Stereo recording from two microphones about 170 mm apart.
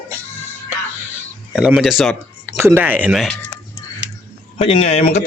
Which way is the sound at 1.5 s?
5° right (ahead or behind).